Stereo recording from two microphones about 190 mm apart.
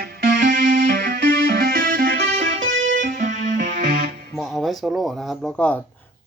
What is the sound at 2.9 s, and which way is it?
Music, 45° right (ahead or behind).